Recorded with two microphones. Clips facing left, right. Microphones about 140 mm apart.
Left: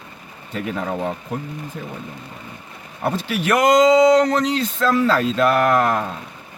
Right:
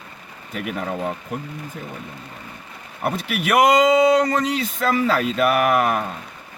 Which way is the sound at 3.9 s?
90° left.